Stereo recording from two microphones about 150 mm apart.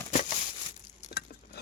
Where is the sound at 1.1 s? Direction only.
90° left.